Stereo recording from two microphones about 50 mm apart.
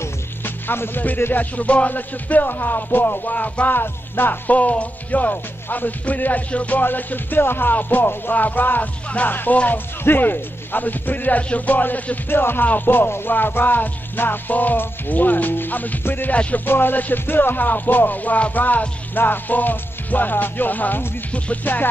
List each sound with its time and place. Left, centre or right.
0.7 s speech: left
1.3 s music: left
3.7 s music: left
16.0 s speech: left
16.3 s music: left
16.6 s music: left